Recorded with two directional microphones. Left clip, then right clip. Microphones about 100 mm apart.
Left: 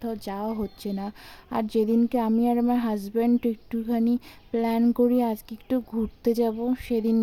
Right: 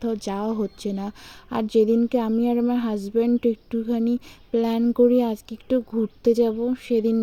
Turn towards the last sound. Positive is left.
turn(degrees=-10)  # may be behind; listen again after turning